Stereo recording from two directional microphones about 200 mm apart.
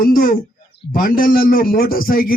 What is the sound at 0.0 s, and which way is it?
A man's voice, 50° left (ahead or behind).